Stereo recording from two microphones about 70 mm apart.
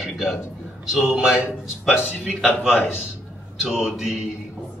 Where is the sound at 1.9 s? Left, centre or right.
Left.